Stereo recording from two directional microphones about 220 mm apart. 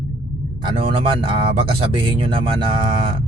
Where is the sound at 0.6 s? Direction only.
25° right (ahead or behind).